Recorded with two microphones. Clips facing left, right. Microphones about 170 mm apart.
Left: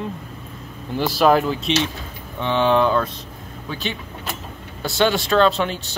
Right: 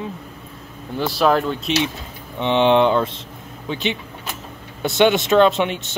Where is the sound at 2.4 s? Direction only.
20° right (ahead or behind).